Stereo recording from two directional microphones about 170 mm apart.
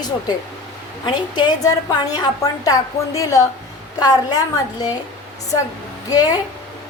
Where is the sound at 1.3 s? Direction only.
25° left (ahead or behind).